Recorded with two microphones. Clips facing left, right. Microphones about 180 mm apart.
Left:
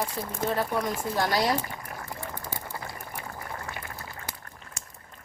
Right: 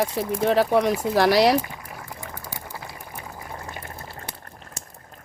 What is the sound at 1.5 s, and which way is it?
Boiling, 10° right (ahead or behind).